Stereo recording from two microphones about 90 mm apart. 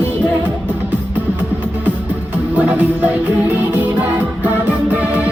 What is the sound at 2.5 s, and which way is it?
Music, 20° right (ahead or behind).